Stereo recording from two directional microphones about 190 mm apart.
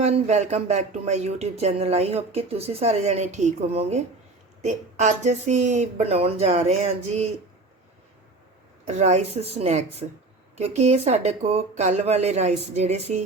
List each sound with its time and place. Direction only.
0.0 s speech: 35° right (ahead or behind)
8.9 s speech: 35° right (ahead or behind)